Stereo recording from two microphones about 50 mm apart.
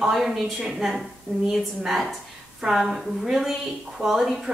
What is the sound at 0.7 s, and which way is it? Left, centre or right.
A woman's voice, centre.